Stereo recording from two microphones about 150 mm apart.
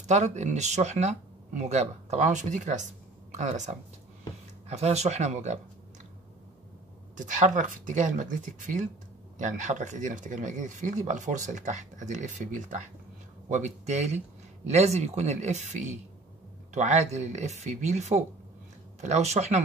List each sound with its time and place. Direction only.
0.0 s speech: 50° right (ahead or behind)
7.2 s speech: 55° right (ahead or behind)